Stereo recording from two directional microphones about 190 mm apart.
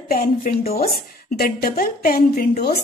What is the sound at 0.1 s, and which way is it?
A woman's voice, 45° left (ahead or behind).